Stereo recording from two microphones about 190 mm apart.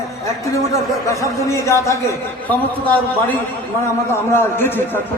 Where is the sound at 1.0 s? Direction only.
15° left (ahead or behind).